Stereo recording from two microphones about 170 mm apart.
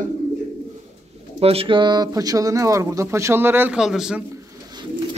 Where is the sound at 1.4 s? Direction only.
35° right (ahead or behind); by 4.2 s 5° right (ahead or behind).